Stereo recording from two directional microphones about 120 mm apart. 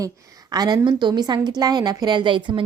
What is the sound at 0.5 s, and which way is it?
A woman's voice, 35° right (ahead or behind).